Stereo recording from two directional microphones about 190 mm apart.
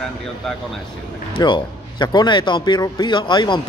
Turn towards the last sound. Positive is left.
turn(degrees=25)  # may be behind; listen again after turning